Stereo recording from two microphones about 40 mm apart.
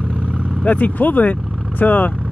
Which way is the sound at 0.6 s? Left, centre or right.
Left.